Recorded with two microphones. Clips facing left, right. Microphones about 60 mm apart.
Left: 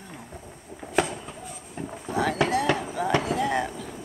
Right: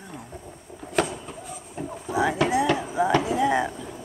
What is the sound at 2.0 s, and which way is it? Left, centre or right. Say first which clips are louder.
Boat: right 2 dB; centre.